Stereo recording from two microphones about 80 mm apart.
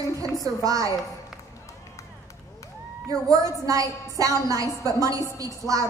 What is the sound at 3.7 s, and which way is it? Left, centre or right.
A woman's voice, right.